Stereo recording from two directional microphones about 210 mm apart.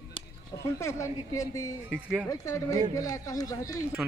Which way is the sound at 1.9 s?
5° right (ahead or behind).